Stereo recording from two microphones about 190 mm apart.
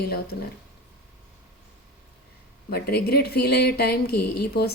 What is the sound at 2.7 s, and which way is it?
Speech, 55° left (ahead or behind).